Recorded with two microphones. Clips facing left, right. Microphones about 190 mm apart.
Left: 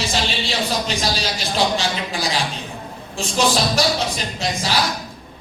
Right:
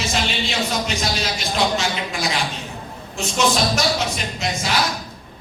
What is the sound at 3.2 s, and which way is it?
A man's voice, 35° left (ahead or behind).